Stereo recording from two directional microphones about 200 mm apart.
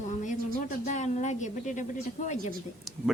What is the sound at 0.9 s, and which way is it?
Speech, 35° left (ahead or behind).